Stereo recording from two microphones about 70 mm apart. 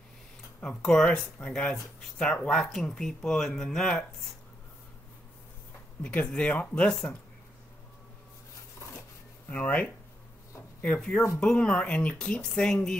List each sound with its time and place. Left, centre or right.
0.6 s speech: centre
6.0 s speech: centre
9.5 s speech: left